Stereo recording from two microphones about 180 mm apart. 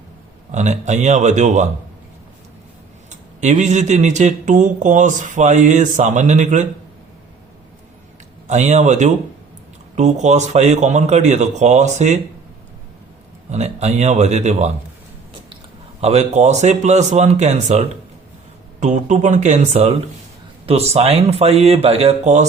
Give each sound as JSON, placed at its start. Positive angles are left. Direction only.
{"t": 0.5, "sound": "speech", "side_deg": -40}
{"t": 3.1, "sound": "speech", "side_deg": -40}
{"t": 8.4, "sound": "speech", "side_deg": -40}
{"t": 13.5, "sound": "speech", "side_deg": -40}
{"t": 16.0, "sound": "speech", "side_deg": -35}